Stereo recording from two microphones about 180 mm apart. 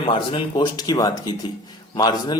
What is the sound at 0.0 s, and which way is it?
Speech, 30° left (ahead or behind).